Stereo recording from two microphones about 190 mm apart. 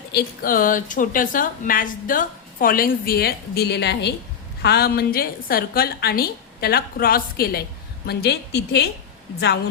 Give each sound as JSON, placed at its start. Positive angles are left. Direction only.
{"t": 0.1, "sound": "a woman's voice", "side_deg": 50}